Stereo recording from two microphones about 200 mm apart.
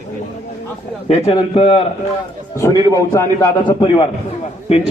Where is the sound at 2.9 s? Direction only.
15° left (ahead or behind).